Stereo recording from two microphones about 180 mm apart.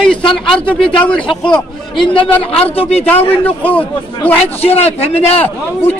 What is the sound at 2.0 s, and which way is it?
Speech, 30° left (ahead or behind).